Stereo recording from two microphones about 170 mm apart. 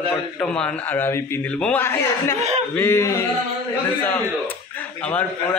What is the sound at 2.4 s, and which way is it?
Speech, 40° right (ahead or behind).